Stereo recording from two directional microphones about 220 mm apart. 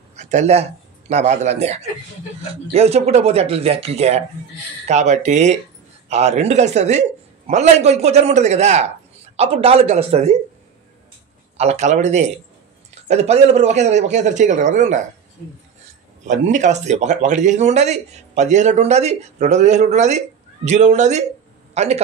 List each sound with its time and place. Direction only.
0.1 s a man's voice: 30° right (ahead or behind)
11.5 s speech: 30° right (ahead or behind)
16.3 s speech: 35° right (ahead or behind)